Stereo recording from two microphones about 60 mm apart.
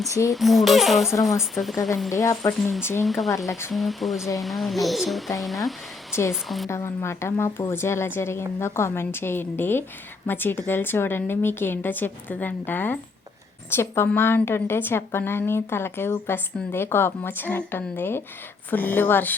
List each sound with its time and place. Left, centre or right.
0.1 s speech: left
0.3 s speech: centre
2.0 s speech: left
3.0 s speech: centre
3.2 s speech: left
3.7 s speech: centre
6.7 s a woman's voice: left
13.7 s a woman's voice: left